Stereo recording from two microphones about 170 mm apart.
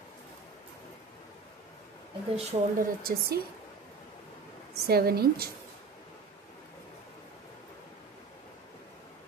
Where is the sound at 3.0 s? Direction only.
60° right (ahead or behind).